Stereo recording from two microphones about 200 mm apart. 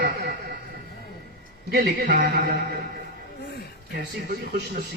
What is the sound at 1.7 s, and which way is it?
Speech, 50° right (ahead or behind).